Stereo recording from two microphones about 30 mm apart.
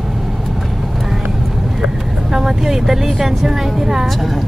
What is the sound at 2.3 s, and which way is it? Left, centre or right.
Speech, centre.